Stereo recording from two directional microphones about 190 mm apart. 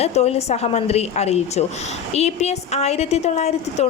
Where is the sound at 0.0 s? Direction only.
35° left (ahead or behind).